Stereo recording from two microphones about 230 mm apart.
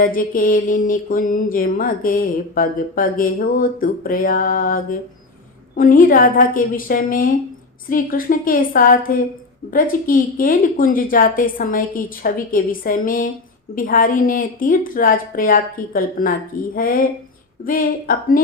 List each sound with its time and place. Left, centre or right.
0.0 s mantra: left